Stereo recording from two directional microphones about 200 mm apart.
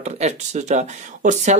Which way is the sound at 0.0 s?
35° right (ahead or behind).